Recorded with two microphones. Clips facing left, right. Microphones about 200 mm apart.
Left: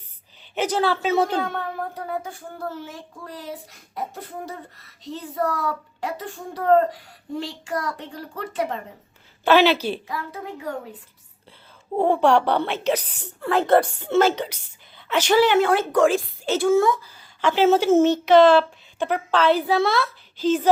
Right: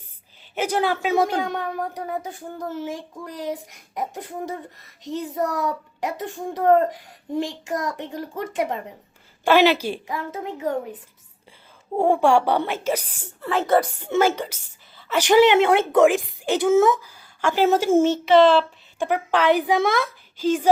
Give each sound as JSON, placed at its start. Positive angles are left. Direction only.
{"t": 0.5, "sound": "speech", "side_deg": -10}
{"t": 11.9, "sound": "speech", "side_deg": -10}
{"t": 15.2, "sound": "speech", "side_deg": -15}
{"t": 18.9, "sound": "speech", "side_deg": -10}